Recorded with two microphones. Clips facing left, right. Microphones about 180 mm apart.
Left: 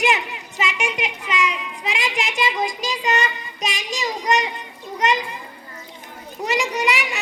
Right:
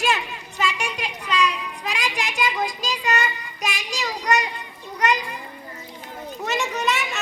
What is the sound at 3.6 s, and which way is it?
Child singing, 20° left (ahead or behind).